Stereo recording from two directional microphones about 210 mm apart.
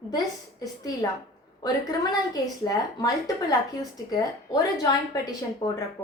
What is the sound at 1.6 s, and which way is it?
A woman's voice, 20° left (ahead or behind).